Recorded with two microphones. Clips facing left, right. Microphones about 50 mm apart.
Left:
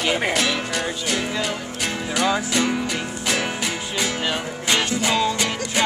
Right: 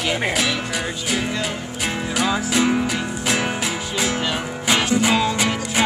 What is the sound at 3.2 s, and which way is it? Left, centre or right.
Music, centre.